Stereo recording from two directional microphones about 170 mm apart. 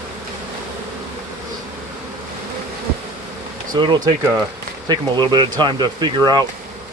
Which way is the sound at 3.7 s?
25° right (ahead or behind).